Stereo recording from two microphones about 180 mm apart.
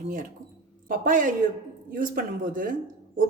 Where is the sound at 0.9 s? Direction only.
45° right (ahead or behind).